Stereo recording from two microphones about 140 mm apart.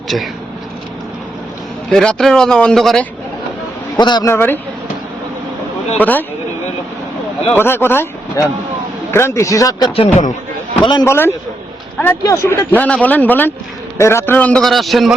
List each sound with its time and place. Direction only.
0.1 s a man's voice: centre (ahead or behind)
1.9 s a man's voice: 5° left (ahead or behind)
3.9 s speech: 30° left (ahead or behind)
4.3 s speech: 15° left (ahead or behind)
6.0 s speech: 10° left (ahead or behind)
7.5 s speech: 15° left (ahead or behind)
9.9 s a man's voice: 45° left (ahead or behind)
10.8 s speech: 35° left (ahead or behind)
11.0 s speech: 20° left (ahead or behind); by 15.1 s centre (ahead or behind)